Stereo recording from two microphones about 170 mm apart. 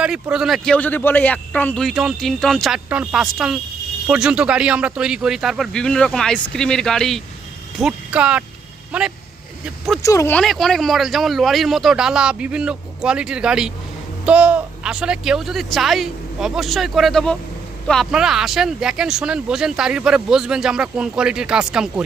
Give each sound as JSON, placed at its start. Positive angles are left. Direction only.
{"t": 0.0, "sound": "speech", "side_deg": -5}
{"t": 10.0, "sound": "speech", "side_deg": 20}
{"t": 10.3, "sound": "speech", "side_deg": 0}